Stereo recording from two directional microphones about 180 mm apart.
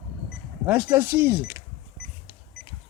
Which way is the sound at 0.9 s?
15° right (ahead or behind).